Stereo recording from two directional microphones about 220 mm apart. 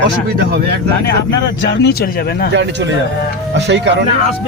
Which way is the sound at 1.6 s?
50° left (ahead or behind).